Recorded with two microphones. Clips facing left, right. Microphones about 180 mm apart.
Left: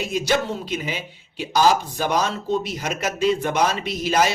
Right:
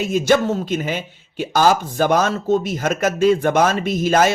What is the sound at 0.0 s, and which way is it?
Speech, 50° right (ahead or behind).